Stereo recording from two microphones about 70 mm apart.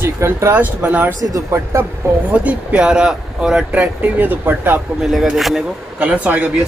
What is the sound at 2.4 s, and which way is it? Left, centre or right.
Speech, centre.